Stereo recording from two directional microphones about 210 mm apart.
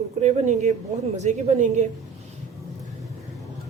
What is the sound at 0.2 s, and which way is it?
A woman's voice, 35° right (ahead or behind).